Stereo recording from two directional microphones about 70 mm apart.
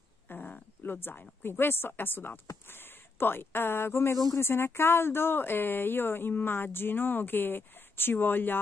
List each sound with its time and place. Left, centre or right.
0.3 s a sound: left
0.9 s speech: left
4.1 s speech: left
4.4 s speech: left